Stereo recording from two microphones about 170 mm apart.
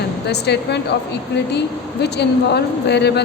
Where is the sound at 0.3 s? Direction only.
75° left (ahead or behind).